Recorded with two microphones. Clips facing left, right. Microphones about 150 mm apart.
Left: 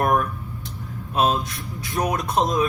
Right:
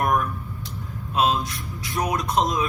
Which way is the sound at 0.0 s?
55° left (ahead or behind).